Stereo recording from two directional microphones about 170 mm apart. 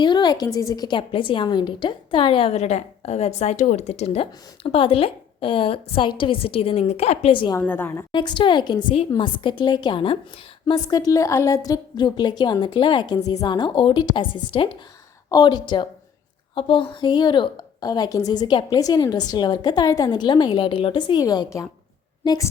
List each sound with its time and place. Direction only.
0.0 s a woman's voice: 25° left (ahead or behind)
7.6 s a woman's voice: 10° left (ahead or behind)
8.1 s a woman's voice: 30° left (ahead or behind)